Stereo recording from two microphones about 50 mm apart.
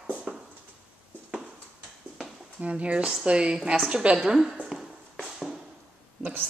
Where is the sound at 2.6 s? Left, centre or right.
Right.